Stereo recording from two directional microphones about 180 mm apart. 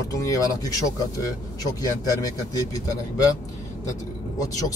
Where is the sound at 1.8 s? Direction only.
20° left (ahead or behind).